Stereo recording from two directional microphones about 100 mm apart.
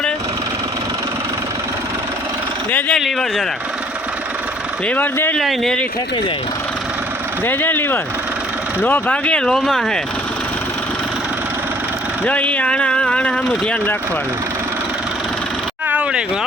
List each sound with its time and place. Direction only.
2.7 s speech: 15° left (ahead or behind)
3.0 s speech: 5° left (ahead or behind)
4.9 s speech: 20° left (ahead or behind)
5.4 s speech: 5° left (ahead or behind)
7.4 s speech: 20° left (ahead or behind); by 10.0 s 5° left (ahead or behind)
12.2 s speech: 15° left (ahead or behind)
15.9 s vehicle: 15° right (ahead or behind)